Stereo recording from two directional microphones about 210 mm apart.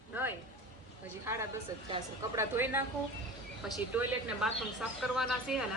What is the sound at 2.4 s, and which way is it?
Speech, 10° right (ahead or behind).